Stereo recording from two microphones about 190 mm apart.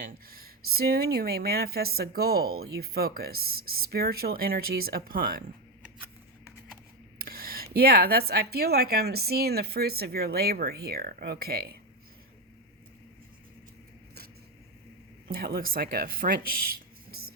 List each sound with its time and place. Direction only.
0.0 s speech: 50° right (ahead or behind)
7.2 s speech: 50° right (ahead or behind)
15.3 s speech: 50° right (ahead or behind)